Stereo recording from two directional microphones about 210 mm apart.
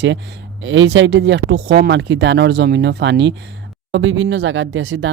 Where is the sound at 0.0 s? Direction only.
55° right (ahead or behind).